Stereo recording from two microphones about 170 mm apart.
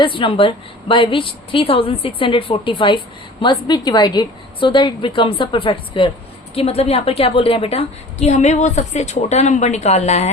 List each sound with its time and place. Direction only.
0.0 s a woman's voice: 30° left (ahead or behind)